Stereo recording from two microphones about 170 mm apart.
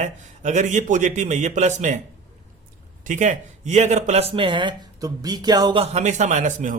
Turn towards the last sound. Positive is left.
turn(degrees=-45)  # may be behind; listen again after turning